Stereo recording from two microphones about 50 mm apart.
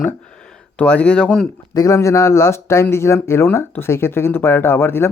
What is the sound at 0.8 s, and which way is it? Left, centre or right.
Speech, left.